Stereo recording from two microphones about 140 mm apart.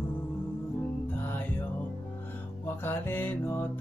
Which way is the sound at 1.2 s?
15° left (ahead or behind).